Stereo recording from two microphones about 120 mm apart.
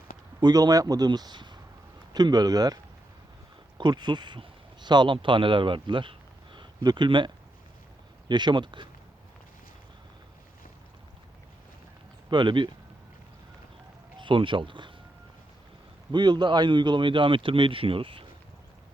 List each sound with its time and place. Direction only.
0.3 s speech: 35° right (ahead or behind)
8.3 s speech: 40° right (ahead or behind)
12.3 s speech: 40° right (ahead or behind)
14.2 s speech: 45° right (ahead or behind)
16.1 s speech: 35° right (ahead or behind)